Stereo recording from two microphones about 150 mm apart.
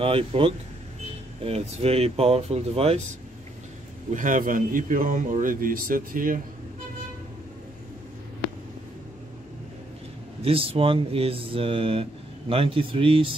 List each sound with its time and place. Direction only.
0.0 s speech: 40° right (ahead or behind)
4.1 s speech: 60° right (ahead or behind)
10.4 s speech: 40° right (ahead or behind)